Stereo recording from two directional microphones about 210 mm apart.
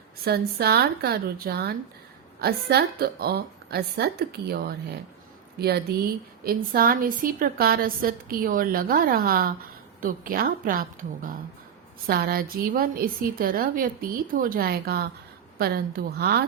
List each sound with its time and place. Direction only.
0.3 s a woman's voice: 50° right (ahead or behind)